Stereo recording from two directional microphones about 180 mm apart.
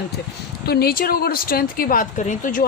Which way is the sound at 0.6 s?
60° left (ahead or behind).